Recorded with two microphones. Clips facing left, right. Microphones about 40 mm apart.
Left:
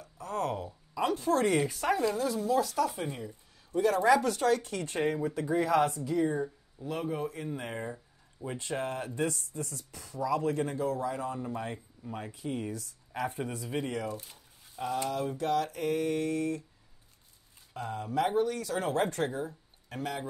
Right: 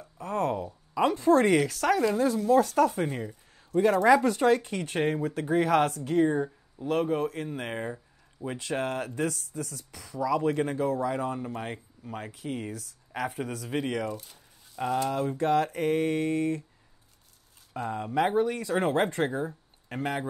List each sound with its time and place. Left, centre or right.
0.0 s a sound: right
1.5 s speech: right
2.0 s mantra: right
4.1 s speech: right
4.8 s mantra: right
8.5 s speech: right
10.2 s speech: right
11.0 s mantra: right
12.1 s speech: right
14.8 s mantra: right
17.7 s speech: right